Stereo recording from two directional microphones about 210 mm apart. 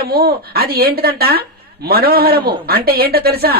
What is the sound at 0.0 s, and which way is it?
A man's voice, 45° right (ahead or behind).